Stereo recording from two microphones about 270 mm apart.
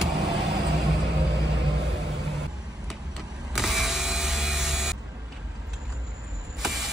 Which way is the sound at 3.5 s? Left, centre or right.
Centre.